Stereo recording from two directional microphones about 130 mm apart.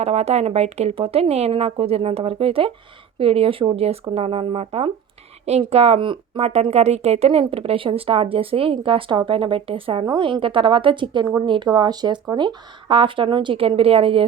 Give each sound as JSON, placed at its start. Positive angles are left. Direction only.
{"t": 0.0, "sound": "speech", "side_deg": -55}
{"t": 6.4, "sound": "a woman's voice", "side_deg": -55}